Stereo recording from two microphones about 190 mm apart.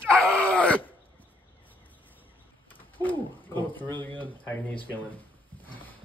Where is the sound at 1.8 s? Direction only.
10° left (ahead or behind).